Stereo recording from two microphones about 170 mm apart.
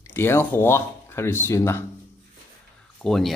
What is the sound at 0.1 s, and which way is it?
Speech, 15° left (ahead or behind).